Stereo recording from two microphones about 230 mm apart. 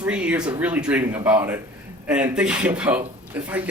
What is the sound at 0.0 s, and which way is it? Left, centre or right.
Speech, centre.